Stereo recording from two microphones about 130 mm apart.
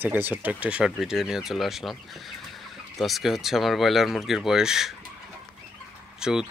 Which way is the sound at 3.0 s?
Centre (ahead or behind).